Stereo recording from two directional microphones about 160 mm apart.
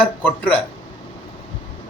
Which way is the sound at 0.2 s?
10° left (ahead or behind).